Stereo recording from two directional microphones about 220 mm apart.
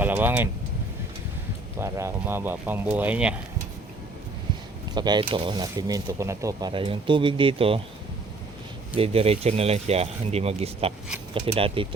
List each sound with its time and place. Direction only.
0.0 s speech: 10° right (ahead or behind)
1.8 s speech: 10° right (ahead or behind)
4.9 s speech: 20° right (ahead or behind)
9.0 s speech: 25° right (ahead or behind)